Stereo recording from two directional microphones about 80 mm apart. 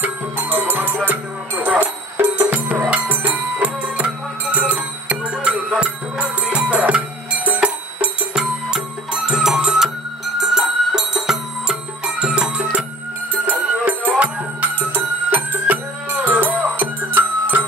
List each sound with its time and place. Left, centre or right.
0.0 s music: right